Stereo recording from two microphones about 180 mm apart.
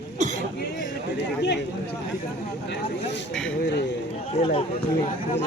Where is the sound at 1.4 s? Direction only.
70° left (ahead or behind).